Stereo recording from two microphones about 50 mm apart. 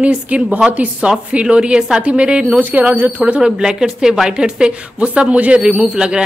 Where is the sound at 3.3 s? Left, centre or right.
Centre.